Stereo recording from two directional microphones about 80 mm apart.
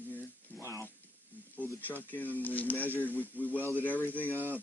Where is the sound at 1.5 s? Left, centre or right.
Left.